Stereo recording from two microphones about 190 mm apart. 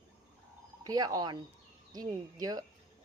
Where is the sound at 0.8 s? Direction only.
20° right (ahead or behind).